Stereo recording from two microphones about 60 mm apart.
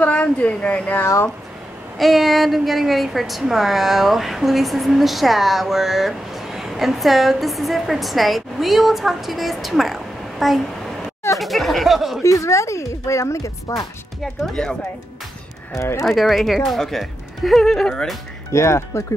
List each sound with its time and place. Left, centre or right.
0.0 s speech: left
2.0 s a woman's voice: centre
12.2 s speech: left
14.2 s speech: centre
15.7 s speech: left
16.1 s a woman's voice: centre
18.5 s speech: left